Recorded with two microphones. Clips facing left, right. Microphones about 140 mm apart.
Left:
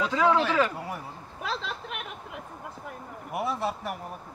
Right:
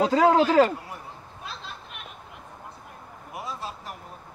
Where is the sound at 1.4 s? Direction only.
90° left.